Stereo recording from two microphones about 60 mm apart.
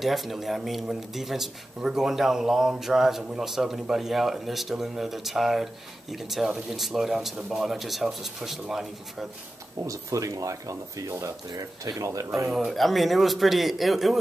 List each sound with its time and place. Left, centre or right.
0.0 s speech: centre
7.3 s speech: centre
7.6 s speech: centre
9.8 s speech: right
12.5 s speech: centre